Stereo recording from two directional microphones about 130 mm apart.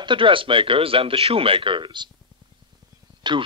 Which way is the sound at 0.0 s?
40° right (ahead or behind).